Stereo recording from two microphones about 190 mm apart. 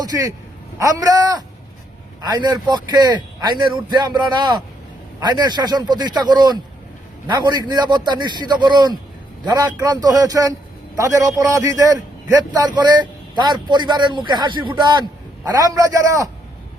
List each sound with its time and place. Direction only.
0.0 s a man's voice: 20° right (ahead or behind)